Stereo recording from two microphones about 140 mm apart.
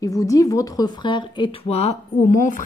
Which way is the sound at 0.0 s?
25° left (ahead or behind).